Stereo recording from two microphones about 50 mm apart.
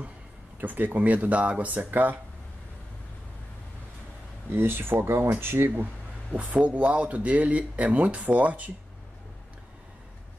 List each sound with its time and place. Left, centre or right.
0.6 s speech: right
4.5 s speech: right
6.3 s speech: right